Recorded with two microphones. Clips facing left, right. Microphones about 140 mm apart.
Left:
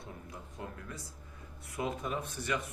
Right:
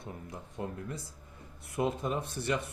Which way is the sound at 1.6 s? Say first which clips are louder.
Right 5 dB; 30° right (ahead or behind).